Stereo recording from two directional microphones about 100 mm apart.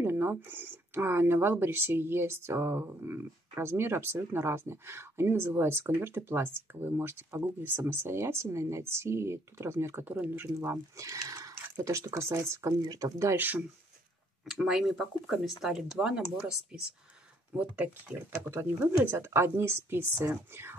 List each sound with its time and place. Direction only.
0.0 s speech: 20° right (ahead or behind)
12.8 s speech: 40° right (ahead or behind)
13.3 s speech: 20° right (ahead or behind)
14.4 s speech: centre (ahead or behind); by 20.2 s 25° right (ahead or behind)